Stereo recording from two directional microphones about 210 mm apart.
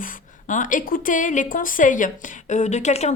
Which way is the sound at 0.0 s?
40° left (ahead or behind).